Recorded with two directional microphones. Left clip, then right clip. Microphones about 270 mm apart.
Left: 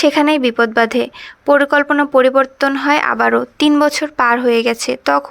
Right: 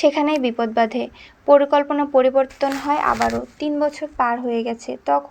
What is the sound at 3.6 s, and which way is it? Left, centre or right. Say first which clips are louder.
Speech: left 7 dB; left.